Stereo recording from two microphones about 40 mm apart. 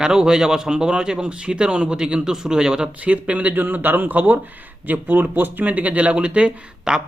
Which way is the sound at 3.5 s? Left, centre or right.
Right.